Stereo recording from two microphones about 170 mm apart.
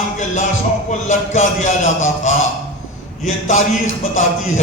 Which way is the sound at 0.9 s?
45° left (ahead or behind).